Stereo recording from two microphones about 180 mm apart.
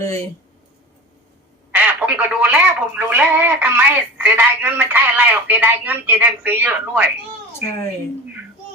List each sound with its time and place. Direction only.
0.0 s speech: 15° left (ahead or behind)
1.7 s speech: 5° right (ahead or behind)